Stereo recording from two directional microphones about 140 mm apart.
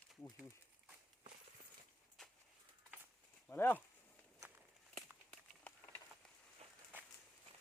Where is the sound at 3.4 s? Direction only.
15° left (ahead or behind).